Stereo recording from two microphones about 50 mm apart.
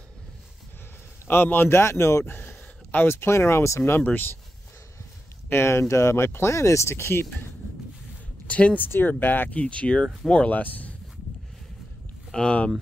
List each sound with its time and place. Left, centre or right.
1.2 s a man's voice: left
1.7 s speech: left
2.3 s speech: left
4.0 s speech: left
5.5 s speech: left
8.5 s speech: left
8.8 s speech: left
9.6 s speech: left
10.5 s speech: left
12.3 s speech: centre